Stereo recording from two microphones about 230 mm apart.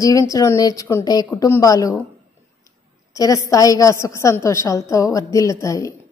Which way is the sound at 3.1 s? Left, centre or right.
Centre.